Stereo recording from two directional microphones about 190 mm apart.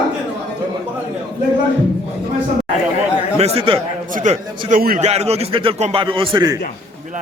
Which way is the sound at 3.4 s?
30° right (ahead or behind).